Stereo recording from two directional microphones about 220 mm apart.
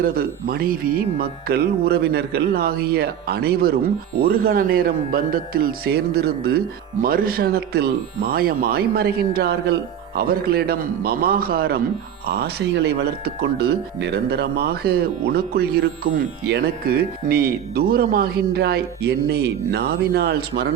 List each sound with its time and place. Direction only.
0.0 s speech: 40° right (ahead or behind)